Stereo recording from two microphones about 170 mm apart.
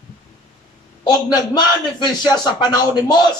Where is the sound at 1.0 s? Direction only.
25° left (ahead or behind).